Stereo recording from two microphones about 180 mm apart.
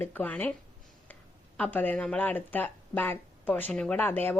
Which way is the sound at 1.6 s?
10° left (ahead or behind).